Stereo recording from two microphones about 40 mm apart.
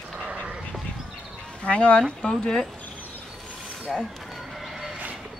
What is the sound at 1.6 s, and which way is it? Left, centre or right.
Speech, left.